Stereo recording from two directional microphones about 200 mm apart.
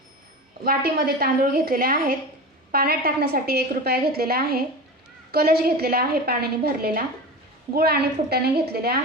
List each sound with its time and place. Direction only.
0.6 s a woman's voice: 50° right (ahead or behind)